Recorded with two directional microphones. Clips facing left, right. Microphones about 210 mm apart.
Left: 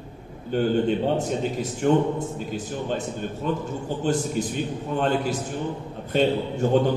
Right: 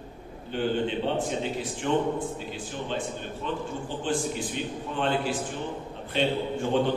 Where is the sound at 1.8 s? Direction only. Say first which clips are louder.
Left 5 dB; 45° left (ahead or behind).